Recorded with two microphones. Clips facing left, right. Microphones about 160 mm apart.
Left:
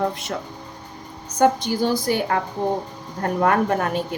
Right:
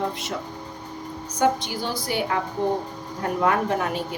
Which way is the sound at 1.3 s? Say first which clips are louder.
Left 4 dB; 45° left (ahead or behind).